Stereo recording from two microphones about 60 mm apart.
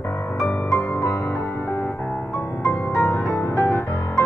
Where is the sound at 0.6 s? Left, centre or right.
Left.